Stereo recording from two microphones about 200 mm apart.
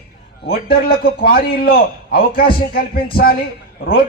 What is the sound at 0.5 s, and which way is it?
A man's voice, 50° left (ahead or behind).